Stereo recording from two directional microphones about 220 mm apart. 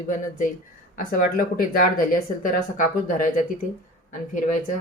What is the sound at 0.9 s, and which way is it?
Speech, 40° left (ahead or behind).